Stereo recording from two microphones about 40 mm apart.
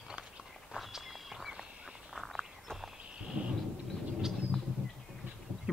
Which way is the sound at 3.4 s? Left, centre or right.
Right.